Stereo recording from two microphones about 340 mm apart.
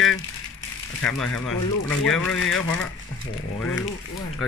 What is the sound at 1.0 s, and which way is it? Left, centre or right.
Speech, centre.